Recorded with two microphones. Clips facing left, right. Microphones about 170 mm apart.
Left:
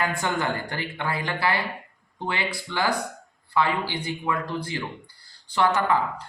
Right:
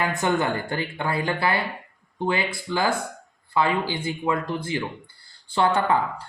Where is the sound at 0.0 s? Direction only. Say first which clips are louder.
Right 3 dB; 20° right (ahead or behind).